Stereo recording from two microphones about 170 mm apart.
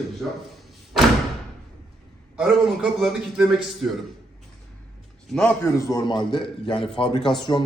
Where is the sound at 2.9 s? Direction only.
Centre (ahead or behind).